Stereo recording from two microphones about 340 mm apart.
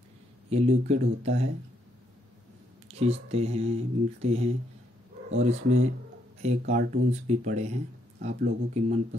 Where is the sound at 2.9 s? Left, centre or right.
Centre.